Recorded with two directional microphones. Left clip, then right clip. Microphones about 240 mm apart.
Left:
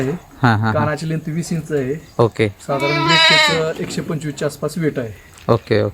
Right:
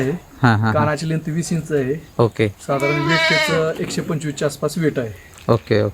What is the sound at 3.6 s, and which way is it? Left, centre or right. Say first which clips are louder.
Speech: even; centre.